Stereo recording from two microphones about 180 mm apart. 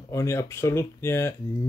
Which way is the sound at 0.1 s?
15° left (ahead or behind).